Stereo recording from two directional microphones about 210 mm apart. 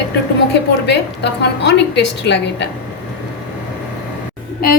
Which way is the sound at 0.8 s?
55° left (ahead or behind).